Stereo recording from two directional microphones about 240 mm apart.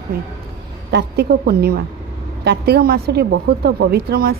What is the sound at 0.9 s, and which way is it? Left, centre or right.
A woman's voice, right.